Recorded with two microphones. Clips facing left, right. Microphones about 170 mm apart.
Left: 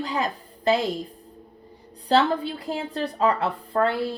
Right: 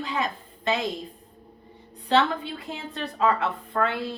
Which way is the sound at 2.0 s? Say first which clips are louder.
Left 2 dB; 35° left (ahead or behind).